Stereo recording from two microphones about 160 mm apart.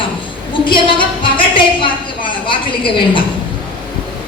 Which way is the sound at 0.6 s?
30° left (ahead or behind).